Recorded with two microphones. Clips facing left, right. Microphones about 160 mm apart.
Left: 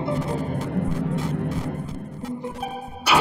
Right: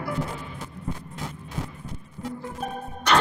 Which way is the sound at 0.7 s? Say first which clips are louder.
Left 13 dB; 80° left.